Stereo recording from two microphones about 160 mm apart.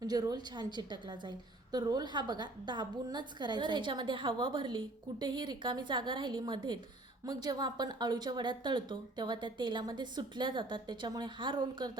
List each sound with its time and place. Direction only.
0.0 s a woman's voice: 25° right (ahead or behind)